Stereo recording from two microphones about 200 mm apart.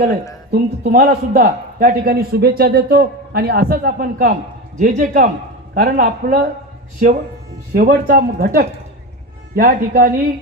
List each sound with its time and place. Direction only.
0.5 s a man's voice: 45° right (ahead or behind)
7.7 s a man's voice: 50° right (ahead or behind)